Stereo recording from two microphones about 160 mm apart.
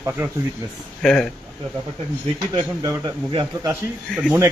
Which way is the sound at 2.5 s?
25° right (ahead or behind).